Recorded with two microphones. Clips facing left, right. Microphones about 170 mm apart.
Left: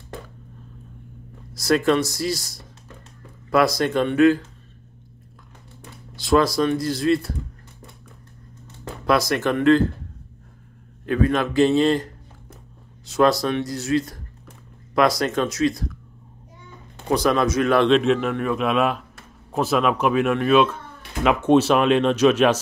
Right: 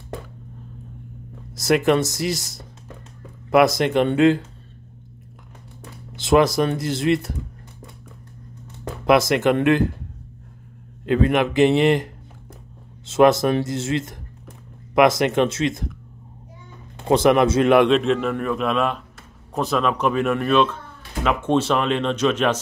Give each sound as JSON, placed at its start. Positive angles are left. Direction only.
{"t": 1.5, "sound": "speech", "side_deg": -20}
{"t": 6.1, "sound": "speech", "side_deg": -20}
{"t": 9.0, "sound": "speech", "side_deg": -20}
{"t": 11.1, "sound": "speech", "side_deg": -20}
{"t": 17.1, "sound": "speech", "side_deg": -20}
{"t": 17.7, "sound": "a man's voice", "side_deg": -5}